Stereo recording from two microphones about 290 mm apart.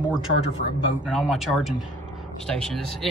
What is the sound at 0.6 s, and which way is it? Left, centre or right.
Speech, left.